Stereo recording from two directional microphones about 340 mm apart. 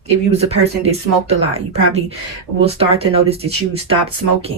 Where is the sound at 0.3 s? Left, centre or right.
Centre.